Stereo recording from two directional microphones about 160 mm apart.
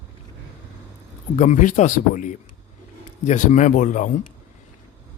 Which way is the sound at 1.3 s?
50° left (ahead or behind).